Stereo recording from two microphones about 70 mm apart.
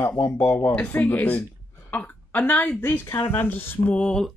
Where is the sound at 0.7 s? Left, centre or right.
Left.